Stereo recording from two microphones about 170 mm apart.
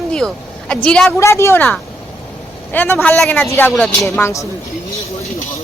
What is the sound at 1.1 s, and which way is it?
A man's voice, 15° left (ahead or behind).